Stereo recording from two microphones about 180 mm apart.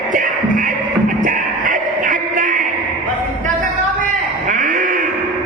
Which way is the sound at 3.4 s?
45° right (ahead or behind).